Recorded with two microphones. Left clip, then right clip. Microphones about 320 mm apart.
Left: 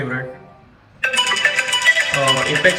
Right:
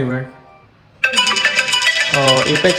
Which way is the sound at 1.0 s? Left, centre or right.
Centre.